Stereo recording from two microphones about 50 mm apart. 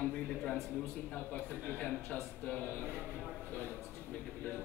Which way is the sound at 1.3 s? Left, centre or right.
Left.